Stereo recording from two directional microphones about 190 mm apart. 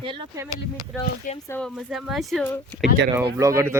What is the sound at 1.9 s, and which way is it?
Speech, centre (ahead or behind).